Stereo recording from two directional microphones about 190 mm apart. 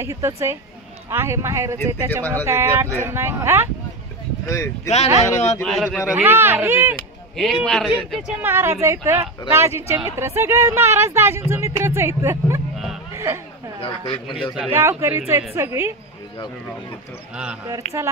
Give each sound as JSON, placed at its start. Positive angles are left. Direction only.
{"t": 0.0, "sound": "speech", "side_deg": -15}
{"t": 4.8, "sound": "speech", "side_deg": 35}
{"t": 5.6, "sound": "speech", "side_deg": 0}
{"t": 6.1, "sound": "speech", "side_deg": -10}
{"t": 7.3, "sound": "speech", "side_deg": 0}
{"t": 8.4, "sound": "speech", "side_deg": -10}
{"t": 13.7, "sound": "a man's voice", "side_deg": 30}
{"t": 14.5, "sound": "speech", "side_deg": -10}
{"t": 17.6, "sound": "speech", "side_deg": -15}